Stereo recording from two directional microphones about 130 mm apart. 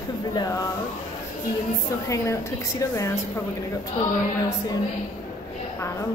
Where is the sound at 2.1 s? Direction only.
25° left (ahead or behind).